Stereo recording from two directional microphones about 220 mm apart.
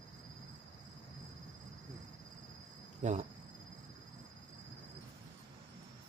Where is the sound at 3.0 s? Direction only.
30° right (ahead or behind).